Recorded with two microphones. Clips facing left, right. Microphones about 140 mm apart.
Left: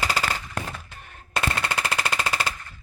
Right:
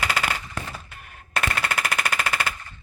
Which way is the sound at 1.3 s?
25° left (ahead or behind).